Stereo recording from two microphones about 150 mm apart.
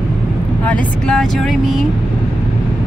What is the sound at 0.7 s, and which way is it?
Speech, 5° left (ahead or behind).